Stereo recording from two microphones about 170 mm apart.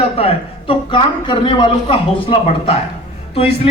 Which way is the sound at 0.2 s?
35° left (ahead or behind).